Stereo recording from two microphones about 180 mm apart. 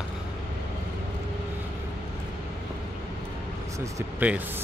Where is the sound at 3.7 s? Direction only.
15° right (ahead or behind).